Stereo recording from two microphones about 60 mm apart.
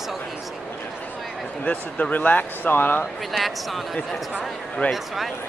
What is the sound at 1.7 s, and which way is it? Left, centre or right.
Speech, left.